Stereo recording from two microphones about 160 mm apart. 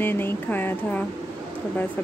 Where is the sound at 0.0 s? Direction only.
15° left (ahead or behind).